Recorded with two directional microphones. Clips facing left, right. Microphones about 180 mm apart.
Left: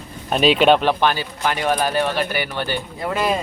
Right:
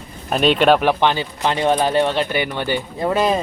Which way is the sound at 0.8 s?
15° right (ahead or behind).